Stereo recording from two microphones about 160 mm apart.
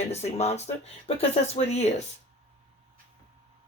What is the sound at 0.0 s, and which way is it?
Speech, 40° left (ahead or behind).